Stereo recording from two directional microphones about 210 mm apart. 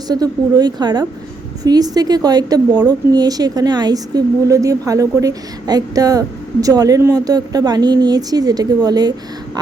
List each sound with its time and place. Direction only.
0.1 s a woman's voice: 20° right (ahead or behind)